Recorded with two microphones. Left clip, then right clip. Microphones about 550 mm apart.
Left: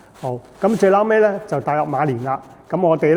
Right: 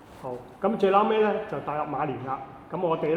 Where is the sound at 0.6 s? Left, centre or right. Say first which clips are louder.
Left 7 dB; left.